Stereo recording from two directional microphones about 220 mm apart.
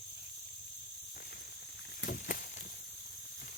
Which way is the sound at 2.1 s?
40° left (ahead or behind).